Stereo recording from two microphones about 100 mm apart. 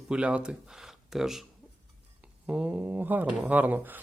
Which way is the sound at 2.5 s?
15° right (ahead or behind).